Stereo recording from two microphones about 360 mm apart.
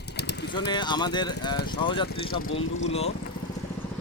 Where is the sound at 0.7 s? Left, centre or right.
Centre.